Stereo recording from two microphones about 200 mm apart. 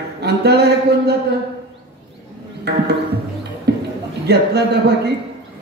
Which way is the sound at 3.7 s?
55° right (ahead or behind).